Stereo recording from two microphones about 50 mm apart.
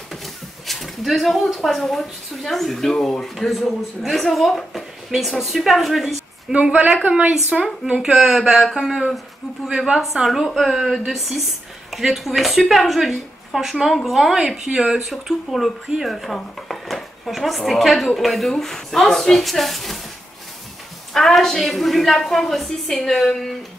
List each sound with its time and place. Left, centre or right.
0.7 s speech: centre
6.5 s speech: right
8.0 s speech: centre
10.1 s speech: centre
21.1 s speech: centre